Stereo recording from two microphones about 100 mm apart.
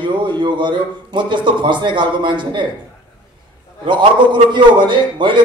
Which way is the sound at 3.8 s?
50° right (ahead or behind).